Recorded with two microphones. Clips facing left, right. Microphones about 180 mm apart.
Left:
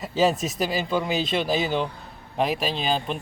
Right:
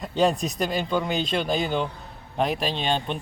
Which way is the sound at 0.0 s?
5° left (ahead or behind).